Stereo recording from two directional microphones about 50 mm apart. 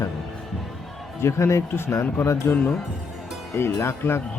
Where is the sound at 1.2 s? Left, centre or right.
Left.